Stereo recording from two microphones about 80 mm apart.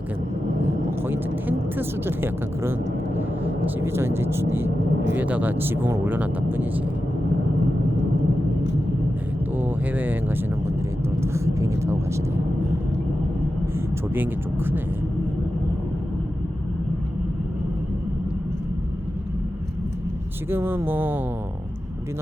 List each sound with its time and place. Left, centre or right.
0.6 s vehicle: right
3.8 s speech: right
9.6 s speech: right
11.2 s speech: right
13.7 s speech: right
20.5 s speech: right